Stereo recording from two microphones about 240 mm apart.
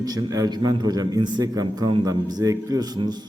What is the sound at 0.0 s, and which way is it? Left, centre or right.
A man's voice, centre.